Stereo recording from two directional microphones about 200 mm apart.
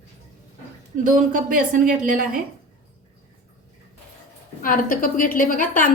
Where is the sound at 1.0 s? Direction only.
40° right (ahead or behind).